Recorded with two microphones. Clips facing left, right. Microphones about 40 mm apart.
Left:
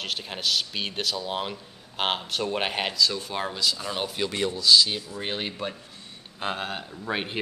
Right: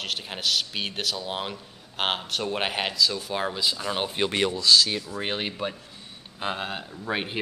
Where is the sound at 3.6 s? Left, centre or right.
Centre.